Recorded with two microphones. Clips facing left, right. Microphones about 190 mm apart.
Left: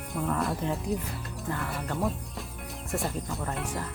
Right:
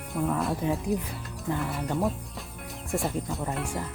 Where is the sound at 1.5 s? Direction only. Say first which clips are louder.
Right 4 dB; 15° right (ahead or behind).